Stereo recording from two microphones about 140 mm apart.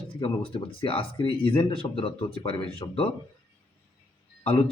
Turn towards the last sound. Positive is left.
turn(degrees=45)  # may be behind; listen again after turning